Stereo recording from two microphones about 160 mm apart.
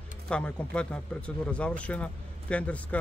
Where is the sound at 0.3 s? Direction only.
5° left (ahead or behind).